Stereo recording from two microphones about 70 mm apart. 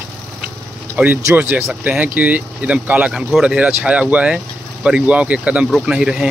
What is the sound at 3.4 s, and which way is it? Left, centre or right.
Speech, centre.